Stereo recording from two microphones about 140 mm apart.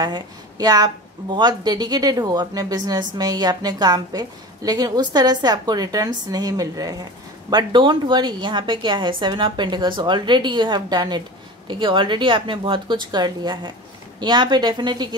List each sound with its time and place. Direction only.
0.0 s a woman's voice: 30° right (ahead or behind)